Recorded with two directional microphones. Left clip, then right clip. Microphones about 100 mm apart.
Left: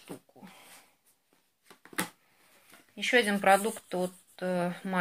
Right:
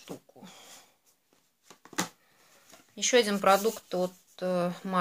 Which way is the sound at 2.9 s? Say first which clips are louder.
Right 1 dB; 25° right (ahead or behind).